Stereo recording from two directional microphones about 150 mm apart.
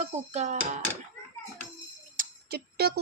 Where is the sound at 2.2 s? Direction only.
90° right.